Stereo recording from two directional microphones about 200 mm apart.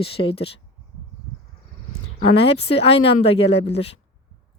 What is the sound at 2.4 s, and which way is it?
A woman's voice, 30° left (ahead or behind).